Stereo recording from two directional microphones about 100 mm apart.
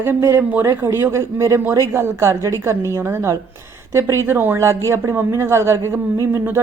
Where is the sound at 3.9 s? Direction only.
25° right (ahead or behind).